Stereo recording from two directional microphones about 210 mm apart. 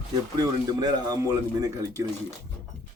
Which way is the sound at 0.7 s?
20° right (ahead or behind).